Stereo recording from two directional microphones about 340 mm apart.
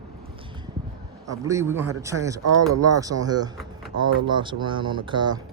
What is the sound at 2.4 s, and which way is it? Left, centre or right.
Speech, right.